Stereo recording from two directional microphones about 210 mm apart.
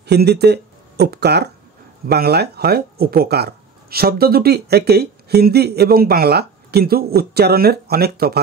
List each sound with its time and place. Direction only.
0.0 s speech: 50° right (ahead or behind)